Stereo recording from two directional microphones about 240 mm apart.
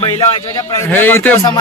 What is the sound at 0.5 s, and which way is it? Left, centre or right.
A man's voice, centre.